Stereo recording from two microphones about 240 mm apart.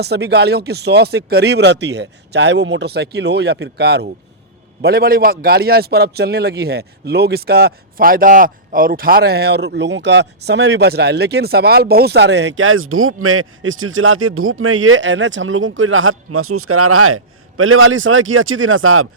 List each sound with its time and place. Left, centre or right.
0.0 s a man's voice: right